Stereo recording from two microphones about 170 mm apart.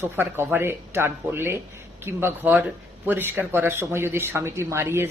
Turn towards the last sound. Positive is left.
turn(degrees=-15)  # may be behind; listen again after turning